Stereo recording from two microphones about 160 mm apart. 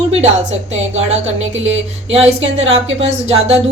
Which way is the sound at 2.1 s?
40° right (ahead or behind).